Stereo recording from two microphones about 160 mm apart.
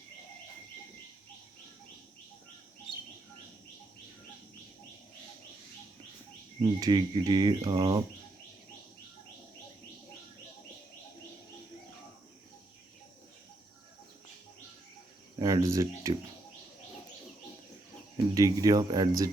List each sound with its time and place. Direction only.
6.6 s speech: 25° right (ahead or behind)
15.4 s a sound: 20° right (ahead or behind)
18.3 s speech: 20° right (ahead or behind)